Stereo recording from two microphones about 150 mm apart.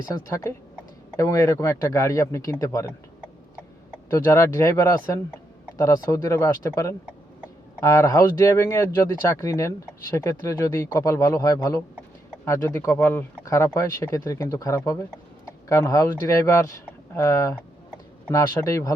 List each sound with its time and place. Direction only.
0.3 s speech: 20° left (ahead or behind)
4.1 s speech: 20° left (ahead or behind)